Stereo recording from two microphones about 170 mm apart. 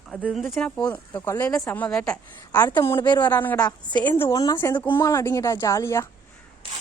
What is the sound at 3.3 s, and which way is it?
Speech, 10° left (ahead or behind).